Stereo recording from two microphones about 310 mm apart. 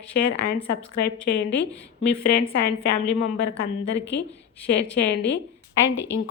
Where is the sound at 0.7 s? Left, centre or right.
Left.